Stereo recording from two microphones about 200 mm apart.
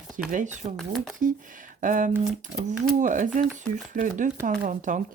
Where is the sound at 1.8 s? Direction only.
40° right (ahead or behind).